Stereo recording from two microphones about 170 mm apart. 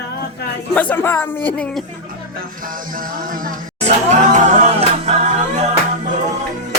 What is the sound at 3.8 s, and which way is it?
Music, 40° right (ahead or behind).